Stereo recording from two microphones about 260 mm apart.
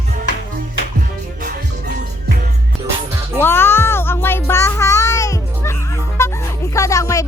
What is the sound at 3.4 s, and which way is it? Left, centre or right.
Music, centre.